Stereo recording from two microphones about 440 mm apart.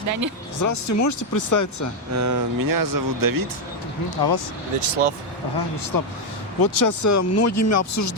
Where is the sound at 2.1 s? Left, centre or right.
Right.